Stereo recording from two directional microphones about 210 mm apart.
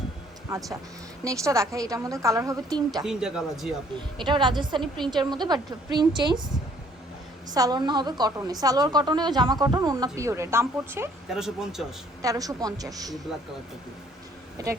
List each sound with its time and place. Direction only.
1.2 s a woman's voice: 15° right (ahead or behind)
3.0 s speech: 5° right (ahead or behind)
4.2 s a woman's voice: 20° right (ahead or behind)
7.5 s a woman's voice: 20° right (ahead or behind); by 11.9 s centre (ahead or behind)
12.2 s a woman's voice: 15° right (ahead or behind)
14.6 s a woman's voice: 15° right (ahead or behind)